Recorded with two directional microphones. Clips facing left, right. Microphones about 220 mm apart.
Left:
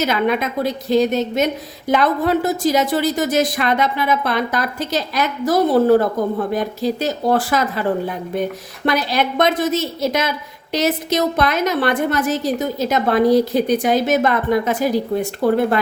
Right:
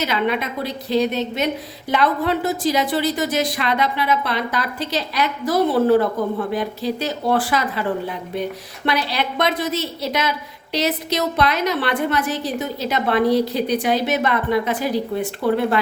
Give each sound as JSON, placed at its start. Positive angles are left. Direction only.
{"t": 0.0, "sound": "speech", "side_deg": 45}